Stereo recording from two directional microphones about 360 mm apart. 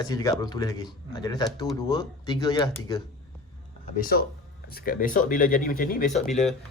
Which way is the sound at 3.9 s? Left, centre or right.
Left.